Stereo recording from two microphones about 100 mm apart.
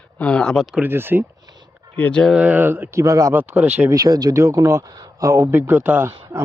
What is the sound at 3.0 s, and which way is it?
Speech, 35° right (ahead or behind).